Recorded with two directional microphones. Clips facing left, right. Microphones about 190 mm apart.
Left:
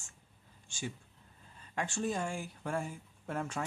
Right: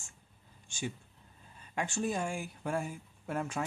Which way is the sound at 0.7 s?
20° right (ahead or behind).